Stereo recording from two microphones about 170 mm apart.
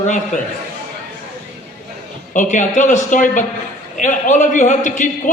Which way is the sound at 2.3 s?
50° left (ahead or behind).